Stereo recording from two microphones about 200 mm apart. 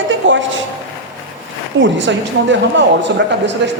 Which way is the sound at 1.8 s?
65° right (ahead or behind).